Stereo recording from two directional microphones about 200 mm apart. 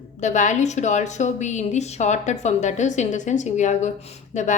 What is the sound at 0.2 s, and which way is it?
A woman's voice, 35° left (ahead or behind).